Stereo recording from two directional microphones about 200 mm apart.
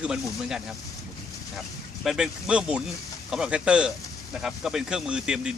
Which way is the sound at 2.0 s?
5° right (ahead or behind).